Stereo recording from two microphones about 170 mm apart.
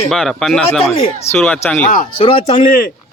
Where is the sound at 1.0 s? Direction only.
40° left (ahead or behind).